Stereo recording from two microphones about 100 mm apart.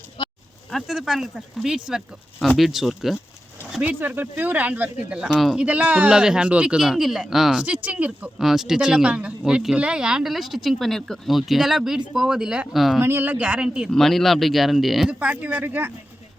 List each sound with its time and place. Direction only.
0.2 s a sound: 55° left (ahead or behind)
0.7 s speech: centre (ahead or behind)
3.8 s a man's voice: 15° right (ahead or behind); by 5.6 s centre (ahead or behind)
5.6 s a man's voice: 15° right (ahead or behind)
7.6 s a man's voice: 15° right (ahead or behind)
8.4 s speech: 5° right (ahead or behind)
13.0 s a man's voice: 20° right (ahead or behind)
13.9 s speech: 5° left (ahead or behind)
15.2 s a man's voice: 15° right (ahead or behind)